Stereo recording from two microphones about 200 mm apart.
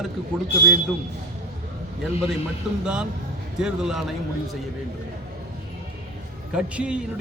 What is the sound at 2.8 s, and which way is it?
A man's voice, 5° right (ahead or behind).